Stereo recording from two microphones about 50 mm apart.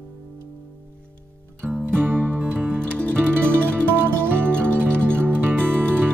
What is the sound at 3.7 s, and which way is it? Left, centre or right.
Music, right.